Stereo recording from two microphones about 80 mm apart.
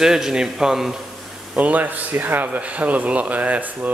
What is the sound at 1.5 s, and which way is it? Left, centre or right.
A man's voice, centre.